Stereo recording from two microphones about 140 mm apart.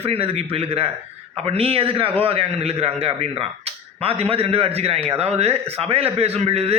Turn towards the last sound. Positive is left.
turn(degrees=-45)  # may be behind; listen again after turning